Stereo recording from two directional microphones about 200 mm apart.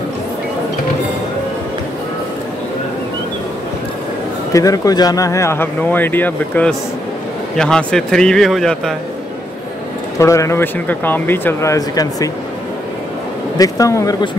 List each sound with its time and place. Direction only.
4.5 s speech: 15° left (ahead or behind); by 8.9 s centre (ahead or behind)
10.1 s speech: 15° left (ahead or behind)
13.6 s speech: 15° left (ahead or behind)